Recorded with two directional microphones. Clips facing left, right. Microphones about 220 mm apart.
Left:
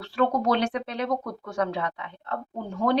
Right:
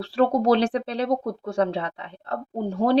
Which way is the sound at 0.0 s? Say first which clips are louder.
Right 4 dB; 30° right (ahead or behind).